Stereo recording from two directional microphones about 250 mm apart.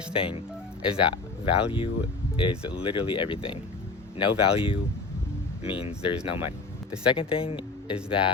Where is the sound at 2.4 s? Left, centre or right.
Left.